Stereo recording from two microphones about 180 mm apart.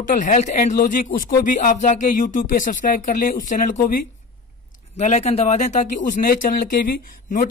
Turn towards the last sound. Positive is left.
turn(degrees=50)  # may be behind; listen again after turning